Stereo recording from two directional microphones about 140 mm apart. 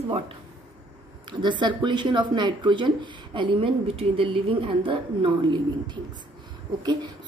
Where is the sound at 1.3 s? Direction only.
35° right (ahead or behind).